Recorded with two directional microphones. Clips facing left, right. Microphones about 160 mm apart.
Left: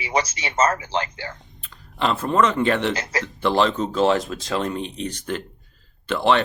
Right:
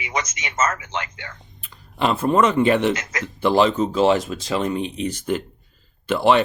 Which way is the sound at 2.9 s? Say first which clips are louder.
Left 4 dB; 35° left (ahead or behind).